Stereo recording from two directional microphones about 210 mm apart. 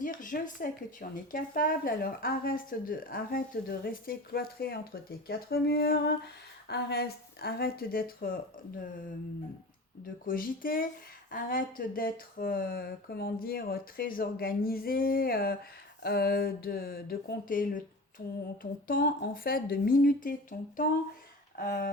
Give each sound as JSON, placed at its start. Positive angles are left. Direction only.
{"t": 0.0, "sound": "speech", "side_deg": 40}
{"t": 10.2, "sound": "speech", "side_deg": 40}